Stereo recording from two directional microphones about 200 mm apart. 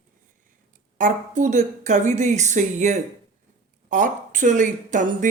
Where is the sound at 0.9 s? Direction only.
40° right (ahead or behind).